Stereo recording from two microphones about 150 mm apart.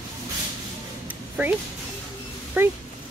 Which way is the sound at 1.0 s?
10° right (ahead or behind).